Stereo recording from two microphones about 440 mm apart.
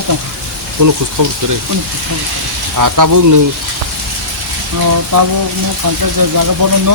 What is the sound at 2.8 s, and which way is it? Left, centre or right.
Speech, right.